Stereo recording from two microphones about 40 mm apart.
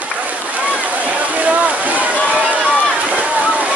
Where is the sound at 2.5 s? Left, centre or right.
Right.